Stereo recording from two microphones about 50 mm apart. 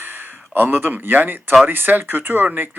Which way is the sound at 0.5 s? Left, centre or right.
Right.